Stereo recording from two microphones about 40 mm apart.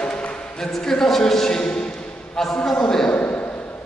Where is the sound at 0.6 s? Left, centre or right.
Centre.